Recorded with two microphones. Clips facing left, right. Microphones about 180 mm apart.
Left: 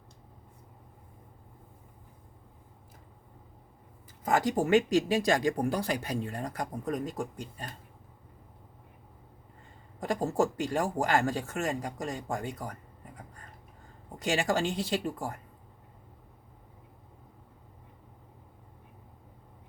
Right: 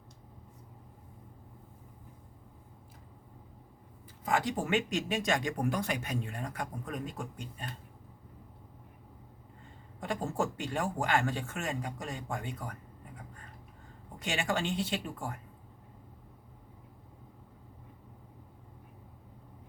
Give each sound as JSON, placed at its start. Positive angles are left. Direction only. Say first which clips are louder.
{"t": 4.2, "sound": "speech", "louder": "left 4 dB", "side_deg": 40}
{"t": 10.0, "sound": "speech", "louder": "left 5 dB", "side_deg": 35}
{"t": 14.2, "sound": "speech", "louder": "left 5 dB", "side_deg": 40}